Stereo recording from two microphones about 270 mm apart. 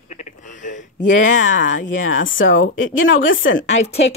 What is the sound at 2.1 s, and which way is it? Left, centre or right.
Speech, left.